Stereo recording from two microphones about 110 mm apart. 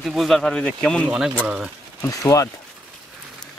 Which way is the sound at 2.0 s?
30° left (ahead or behind).